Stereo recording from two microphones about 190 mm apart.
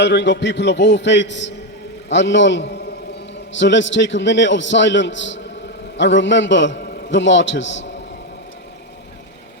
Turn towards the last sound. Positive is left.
turn(degrees=75)  # may be behind; listen again after turning